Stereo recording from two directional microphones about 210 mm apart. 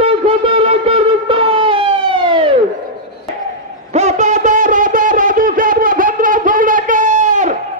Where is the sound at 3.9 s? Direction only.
35° right (ahead or behind).